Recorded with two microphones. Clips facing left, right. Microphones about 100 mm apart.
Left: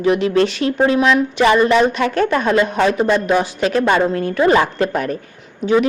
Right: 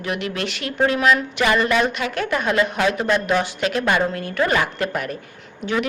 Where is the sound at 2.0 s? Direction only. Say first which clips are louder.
Left 6 dB; 40° left (ahead or behind).